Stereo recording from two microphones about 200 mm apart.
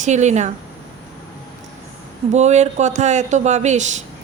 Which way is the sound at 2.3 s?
35° right (ahead or behind).